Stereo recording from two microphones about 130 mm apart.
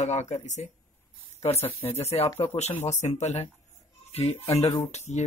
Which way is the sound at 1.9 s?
55° left (ahead or behind).